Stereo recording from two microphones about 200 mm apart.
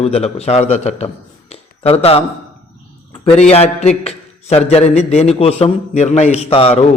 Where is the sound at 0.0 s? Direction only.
30° left (ahead or behind).